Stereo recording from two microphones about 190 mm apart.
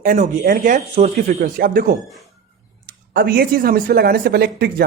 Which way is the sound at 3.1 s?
55° right (ahead or behind).